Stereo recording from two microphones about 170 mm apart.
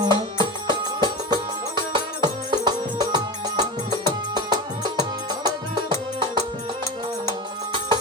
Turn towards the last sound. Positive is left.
turn(degrees=-30)  # may be behind; listen again after turning